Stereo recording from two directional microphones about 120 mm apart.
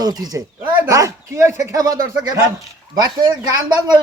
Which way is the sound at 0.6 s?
20° right (ahead or behind).